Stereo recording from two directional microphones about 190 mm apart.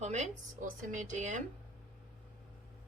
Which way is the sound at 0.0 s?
35° right (ahead or behind).